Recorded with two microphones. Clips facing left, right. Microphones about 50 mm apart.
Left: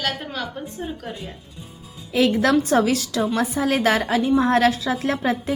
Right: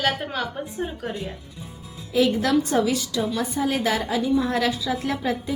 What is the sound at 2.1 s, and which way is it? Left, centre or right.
A woman's voice, left.